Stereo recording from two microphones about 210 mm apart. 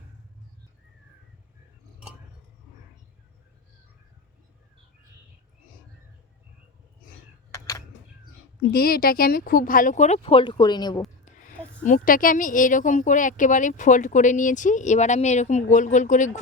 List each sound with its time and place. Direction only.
8.7 s a woman's voice: 45° left (ahead or behind); by 11.0 s 20° left (ahead or behind)
11.3 s a sound: 35° left (ahead or behind)
11.8 s a woman's voice: 40° left (ahead or behind)